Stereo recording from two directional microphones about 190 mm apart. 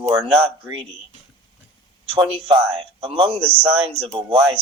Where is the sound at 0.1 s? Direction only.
25° right (ahead or behind).